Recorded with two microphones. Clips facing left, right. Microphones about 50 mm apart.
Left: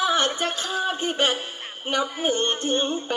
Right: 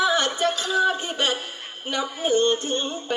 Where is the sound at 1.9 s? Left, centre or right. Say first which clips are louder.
Even; left.